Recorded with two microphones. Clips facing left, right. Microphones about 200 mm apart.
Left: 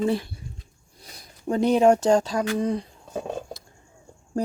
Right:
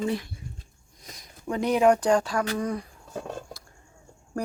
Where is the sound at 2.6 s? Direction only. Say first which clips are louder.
Left 4 dB; 25° left (ahead or behind).